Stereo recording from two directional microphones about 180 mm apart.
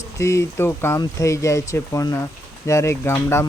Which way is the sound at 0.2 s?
15° left (ahead or behind).